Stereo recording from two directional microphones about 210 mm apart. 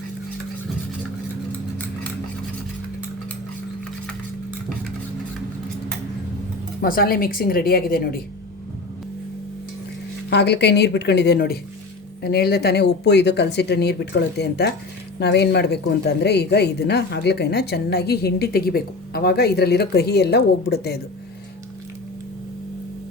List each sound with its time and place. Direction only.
6.8 s a woman's voice: 45° left (ahead or behind)
10.2 s a woman's voice: 55° left (ahead or behind)